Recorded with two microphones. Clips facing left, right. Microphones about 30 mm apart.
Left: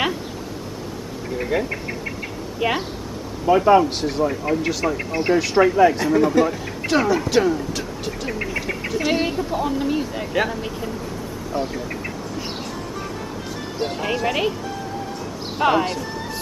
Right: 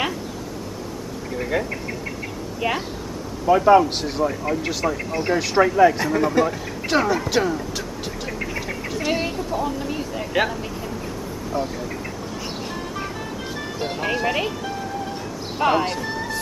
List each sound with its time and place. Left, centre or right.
1.4 s speech: centre
4.9 s speech: centre
5.3 s speech: centre
8.5 s speech: centre
11.5 s duck: centre
13.9 s speech: centre
15.5 s speech: centre